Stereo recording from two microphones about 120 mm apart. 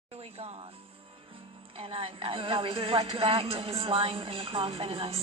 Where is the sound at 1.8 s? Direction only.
50° right (ahead or behind).